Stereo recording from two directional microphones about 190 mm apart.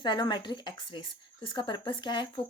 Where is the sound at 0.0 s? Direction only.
20° left (ahead or behind).